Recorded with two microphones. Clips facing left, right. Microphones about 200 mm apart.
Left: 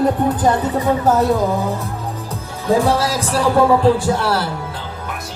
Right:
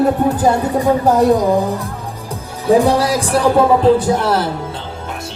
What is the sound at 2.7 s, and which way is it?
Speech, 15° right (ahead or behind).